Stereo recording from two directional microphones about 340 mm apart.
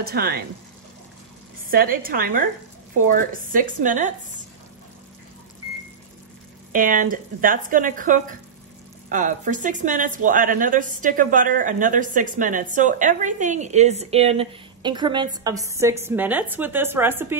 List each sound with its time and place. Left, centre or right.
0.0 s a woman's voice: right
1.7 s a woman's voice: right
6.7 s a woman's voice: right; by 17.4 s centre